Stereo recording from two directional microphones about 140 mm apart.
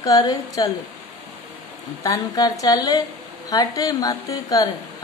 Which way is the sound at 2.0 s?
25° left (ahead or behind).